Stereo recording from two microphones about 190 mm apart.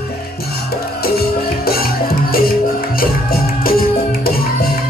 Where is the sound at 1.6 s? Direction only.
50° left (ahead or behind).